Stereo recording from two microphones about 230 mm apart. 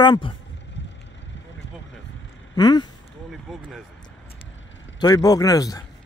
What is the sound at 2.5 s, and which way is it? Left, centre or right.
Speech, centre.